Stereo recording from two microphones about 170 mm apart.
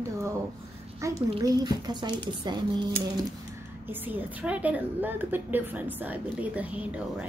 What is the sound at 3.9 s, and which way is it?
A woman's voice, 10° right (ahead or behind).